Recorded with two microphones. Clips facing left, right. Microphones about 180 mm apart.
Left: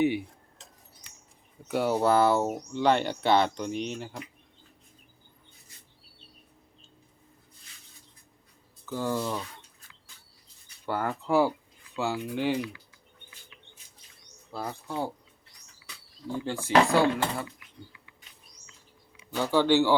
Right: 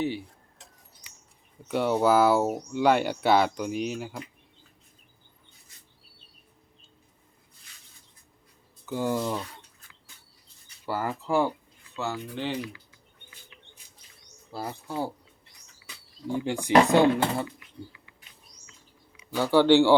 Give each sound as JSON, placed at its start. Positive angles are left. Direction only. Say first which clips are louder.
{"t": 1.6, "sound": "speech", "louder": "right 2 dB", "side_deg": 0}
{"t": 8.9, "sound": "speech", "louder": "right 2 dB", "side_deg": -15}
{"t": 10.8, "sound": "speech", "louder": "even", "side_deg": -5}
{"t": 14.5, "sound": "speech", "louder": "right 1 dB", "side_deg": -5}
{"t": 16.2, "sound": "speech", "louder": "right 3 dB", "side_deg": -15}
{"t": 19.5, "sound": "speech", "louder": "right 4 dB", "side_deg": -15}